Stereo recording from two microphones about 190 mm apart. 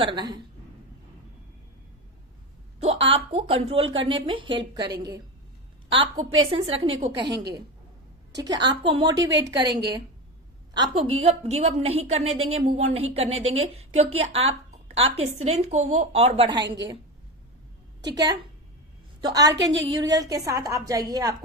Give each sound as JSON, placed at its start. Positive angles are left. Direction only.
{"t": 0.0, "sound": "a woman's voice", "side_deg": -25}
{"t": 2.8, "sound": "a woman's voice", "side_deg": -30}
{"t": 7.3, "sound": "a woman's voice", "side_deg": -60}
{"t": 8.4, "sound": "a woman's voice", "side_deg": -20}
{"t": 10.8, "sound": "a woman's voice", "side_deg": -25}
{"t": 16.6, "sound": "a woman's voice", "side_deg": -65}
{"t": 18.0, "sound": "a woman's voice", "side_deg": -20}
{"t": 19.5, "sound": "a woman's voice", "side_deg": -75}
{"t": 20.0, "sound": "a woman's voice", "side_deg": -20}